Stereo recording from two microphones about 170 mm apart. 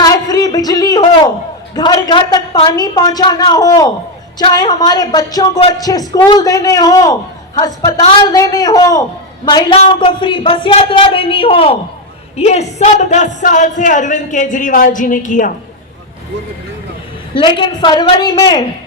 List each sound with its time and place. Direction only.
0.0 s a sound: 20° left (ahead or behind)
1.7 s a woman's voice: 25° left (ahead or behind); by 15.5 s 50° left (ahead or behind)
17.3 s a man's voice: 25° left (ahead or behind)